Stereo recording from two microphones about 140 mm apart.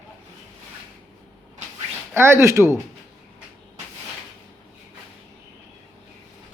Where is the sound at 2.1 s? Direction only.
20° right (ahead or behind).